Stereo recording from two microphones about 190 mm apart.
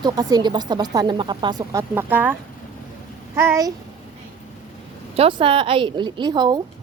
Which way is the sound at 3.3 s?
15° right (ahead or behind).